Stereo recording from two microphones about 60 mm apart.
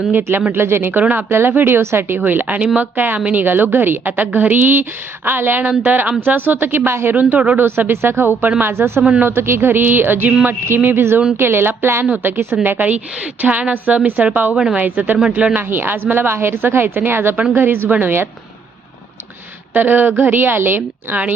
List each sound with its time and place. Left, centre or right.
0.1 s a woman's voice: right
7.2 s a woman's voice: right
7.6 s a woman's voice: right
9.0 s a woman's voice: centre
9.2 s a woman's voice: right
12.6 s a woman's voice: right
14.5 s speech: centre
14.8 s a woman's voice: right
17.8 s a woman's voice: right
19.7 s a woman's voice: right